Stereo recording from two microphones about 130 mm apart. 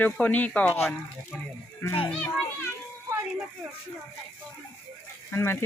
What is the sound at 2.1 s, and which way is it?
Speech, 5° left (ahead or behind).